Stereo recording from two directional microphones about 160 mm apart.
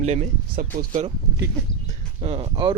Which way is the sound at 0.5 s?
65° right (ahead or behind).